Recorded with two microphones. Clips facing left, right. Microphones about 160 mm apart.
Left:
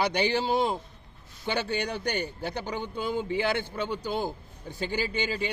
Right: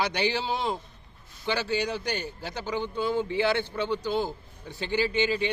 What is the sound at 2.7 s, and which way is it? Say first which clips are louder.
A man's voice: right 6 dB; 15° left (ahead or behind).